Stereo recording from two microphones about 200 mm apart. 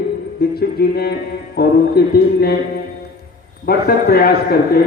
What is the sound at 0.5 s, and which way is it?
A man's voice, 50° left (ahead or behind).